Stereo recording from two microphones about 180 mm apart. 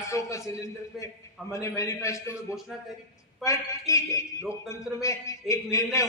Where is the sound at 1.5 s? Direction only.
15° left (ahead or behind).